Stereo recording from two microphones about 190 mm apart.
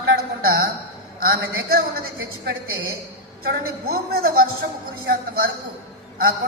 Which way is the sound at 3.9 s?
55° right (ahead or behind).